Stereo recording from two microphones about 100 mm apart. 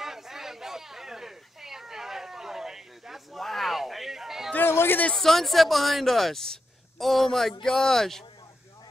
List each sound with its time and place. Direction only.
0.0 s a sound: 5° right (ahead or behind)
4.5 s speech: 20° left (ahead or behind)
5.1 s speech: centre (ahead or behind)